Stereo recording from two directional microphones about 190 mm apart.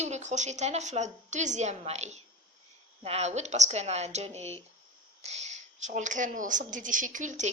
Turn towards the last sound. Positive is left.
turn(degrees=-40)  # may be behind; listen again after turning